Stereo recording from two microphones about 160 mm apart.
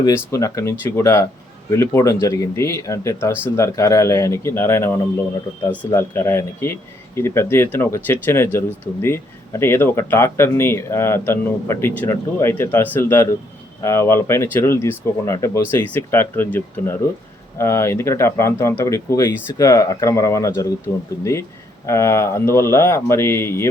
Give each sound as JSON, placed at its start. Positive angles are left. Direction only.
{"t": 0.3, "sound": "speech", "side_deg": 20}
{"t": 5.9, "sound": "speech", "side_deg": 15}
{"t": 21.8, "sound": "speech", "side_deg": 20}